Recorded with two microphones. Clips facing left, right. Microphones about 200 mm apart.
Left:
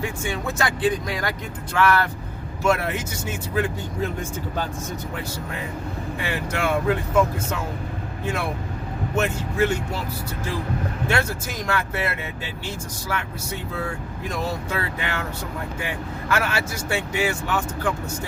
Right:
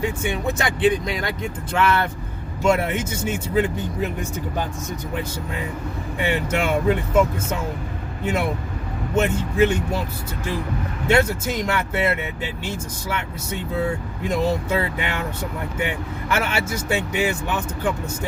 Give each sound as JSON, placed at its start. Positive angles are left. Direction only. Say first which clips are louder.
{"t": 0.0, "sound": "speech", "louder": "right 4 dB", "side_deg": -20}
{"t": 6.2, "sound": "speech", "louder": "right 4 dB", "side_deg": -20}
{"t": 8.2, "sound": "speech", "louder": "right 4 dB", "side_deg": -20}
{"t": 11.1, "sound": "speech", "louder": "right 8 dB", "side_deg": -20}
{"t": 13.1, "sound": "speech", "louder": "right 1 dB", "side_deg": -20}
{"t": 16.3, "sound": "speech", "louder": "right 1 dB", "side_deg": -20}